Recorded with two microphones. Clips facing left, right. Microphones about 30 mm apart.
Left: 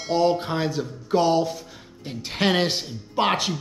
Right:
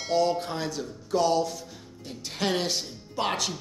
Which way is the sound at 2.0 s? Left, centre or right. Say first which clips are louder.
Left 6 dB; left.